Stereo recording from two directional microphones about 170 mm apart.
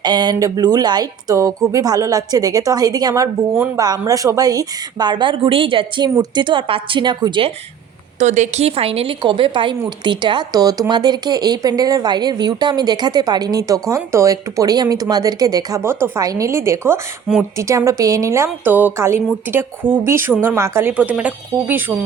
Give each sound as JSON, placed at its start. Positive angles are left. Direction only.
{"t": 0.0, "sound": "speech", "side_deg": -25}
{"t": 8.2, "sound": "a woman's voice", "side_deg": -45}